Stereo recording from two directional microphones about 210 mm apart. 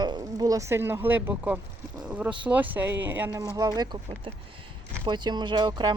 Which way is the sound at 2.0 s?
5° right (ahead or behind).